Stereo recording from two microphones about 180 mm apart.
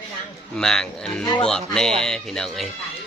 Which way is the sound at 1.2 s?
25° left (ahead or behind).